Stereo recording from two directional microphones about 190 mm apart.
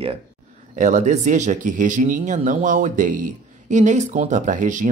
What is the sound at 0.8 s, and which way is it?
Speech, 40° right (ahead or behind).